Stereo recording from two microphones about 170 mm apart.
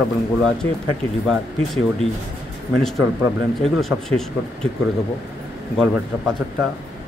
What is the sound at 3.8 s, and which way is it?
Speech, centre (ahead or behind).